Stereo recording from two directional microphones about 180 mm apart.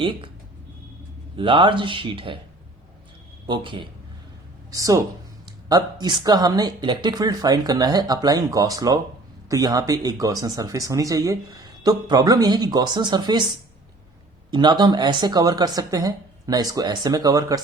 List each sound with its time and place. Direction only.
1.4 s speech: 30° right (ahead or behind)
3.4 s speech: 25° right (ahead or behind)
14.5 s speech: 25° right (ahead or behind)